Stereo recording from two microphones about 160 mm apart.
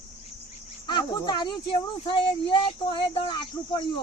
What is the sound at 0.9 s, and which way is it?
Speech, 25° left (ahead or behind).